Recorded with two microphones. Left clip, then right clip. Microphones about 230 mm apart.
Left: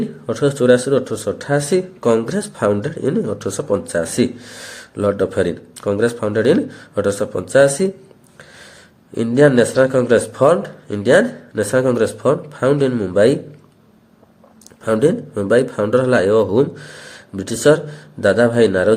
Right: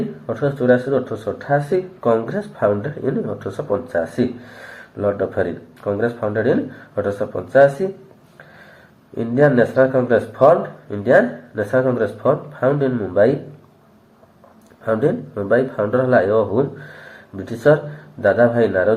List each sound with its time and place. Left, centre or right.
0.3 s speech: left
9.1 s speech: left
14.8 s speech: left